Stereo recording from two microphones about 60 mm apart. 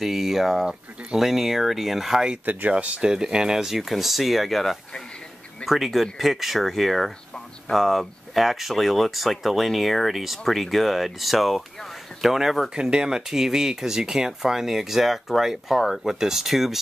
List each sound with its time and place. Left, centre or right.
0.0 s speech: centre
2.7 s speech: right
3.1 s speech: centre